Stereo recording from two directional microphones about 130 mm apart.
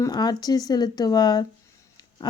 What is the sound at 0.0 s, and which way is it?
Speech, 30° left (ahead or behind).